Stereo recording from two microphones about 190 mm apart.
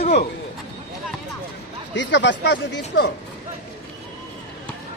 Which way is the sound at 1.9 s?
70° left (ahead or behind).